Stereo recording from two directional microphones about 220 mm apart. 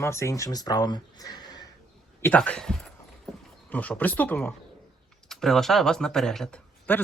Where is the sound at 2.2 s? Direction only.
5° left (ahead or behind).